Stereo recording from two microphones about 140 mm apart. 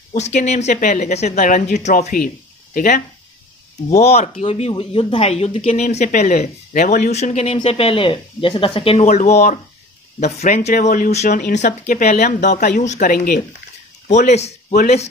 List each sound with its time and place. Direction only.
0.1 s speech: 60° left (ahead or behind); by 3.0 s 80° left
3.9 s speech: 50° left (ahead or behind)
9.0 s speech: 55° left (ahead or behind)
11.9 s speech: 80° left
14.0 s speech: 55° left (ahead or behind)